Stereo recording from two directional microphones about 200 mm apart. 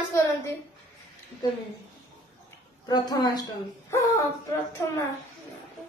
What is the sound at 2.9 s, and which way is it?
Speech, 20° left (ahead or behind).